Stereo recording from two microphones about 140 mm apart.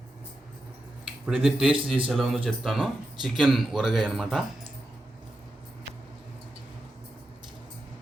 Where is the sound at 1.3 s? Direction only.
5° right (ahead or behind).